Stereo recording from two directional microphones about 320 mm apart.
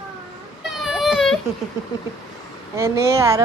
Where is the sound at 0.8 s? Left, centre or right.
Centre.